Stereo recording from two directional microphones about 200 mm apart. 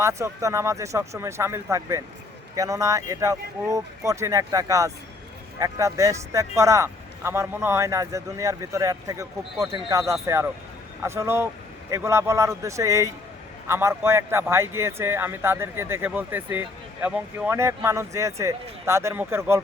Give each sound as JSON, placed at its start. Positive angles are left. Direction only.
{"t": 0.0, "sound": "a man's voice", "side_deg": -15}